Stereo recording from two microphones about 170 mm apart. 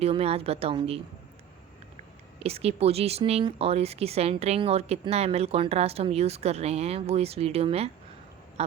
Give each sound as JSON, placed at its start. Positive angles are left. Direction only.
{"t": 0.0, "sound": "speech", "side_deg": -35}
{"t": 2.4, "sound": "speech", "side_deg": -35}